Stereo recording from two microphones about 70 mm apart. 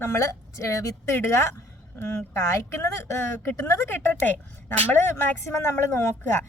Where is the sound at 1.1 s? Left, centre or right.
Left.